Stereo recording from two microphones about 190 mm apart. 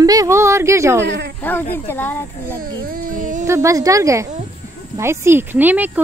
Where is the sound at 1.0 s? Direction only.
65° right (ahead or behind).